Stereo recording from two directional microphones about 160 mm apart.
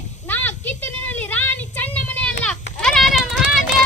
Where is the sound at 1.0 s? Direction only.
10° left (ahead or behind).